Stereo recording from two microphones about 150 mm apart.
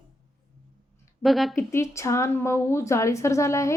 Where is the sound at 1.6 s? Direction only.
20° left (ahead or behind).